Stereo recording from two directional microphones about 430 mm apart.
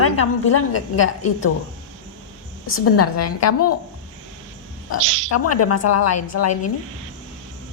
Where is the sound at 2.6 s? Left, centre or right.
Left.